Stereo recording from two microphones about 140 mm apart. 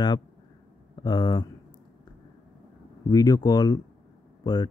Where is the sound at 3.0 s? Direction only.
25° left (ahead or behind).